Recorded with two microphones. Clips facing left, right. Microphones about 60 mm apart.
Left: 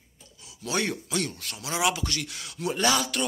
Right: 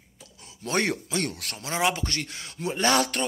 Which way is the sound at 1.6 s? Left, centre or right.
Right.